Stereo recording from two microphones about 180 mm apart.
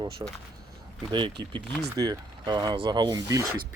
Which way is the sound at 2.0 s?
25° right (ahead or behind).